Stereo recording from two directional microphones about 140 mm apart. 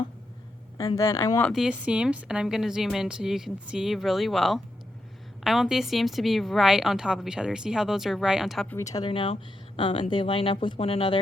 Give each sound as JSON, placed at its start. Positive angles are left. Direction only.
{"t": 0.9, "sound": "speech", "side_deg": 25}
{"t": 1.5, "sound": "a woman's voice", "side_deg": -5}
{"t": 8.7, "sound": "speech", "side_deg": 25}
{"t": 9.0, "sound": "speech", "side_deg": 40}